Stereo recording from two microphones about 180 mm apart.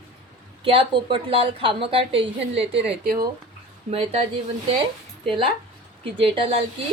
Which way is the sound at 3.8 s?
35° right (ahead or behind).